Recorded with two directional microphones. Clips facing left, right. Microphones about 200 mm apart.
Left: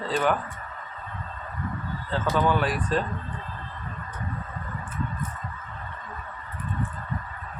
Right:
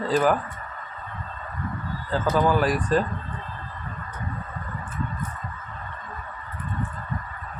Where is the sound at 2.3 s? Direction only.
5° right (ahead or behind).